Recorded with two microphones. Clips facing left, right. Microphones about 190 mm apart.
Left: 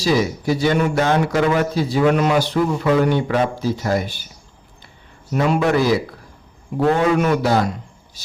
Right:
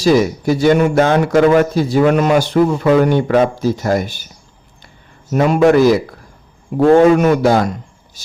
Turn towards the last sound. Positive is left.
turn(degrees=-50)  # may be behind; listen again after turning